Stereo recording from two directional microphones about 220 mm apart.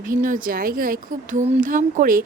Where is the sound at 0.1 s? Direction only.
35° right (ahead or behind).